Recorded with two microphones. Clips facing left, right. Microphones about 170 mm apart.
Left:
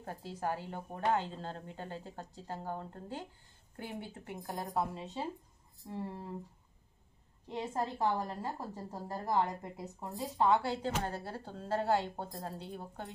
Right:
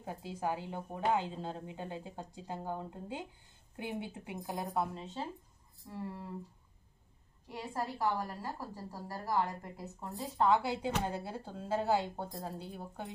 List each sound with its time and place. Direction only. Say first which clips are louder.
0.0 s a woman's voice: right 1 dB; 10° right (ahead or behind)
4.7 s speech: left 2 dB; 5° left (ahead or behind)
5.9 s a woman's voice: left 2 dB; 25° left (ahead or behind)
7.4 s a woman's voice: left 3 dB; 20° left (ahead or behind)
10.3 s a woman's voice: even; centre (ahead or behind)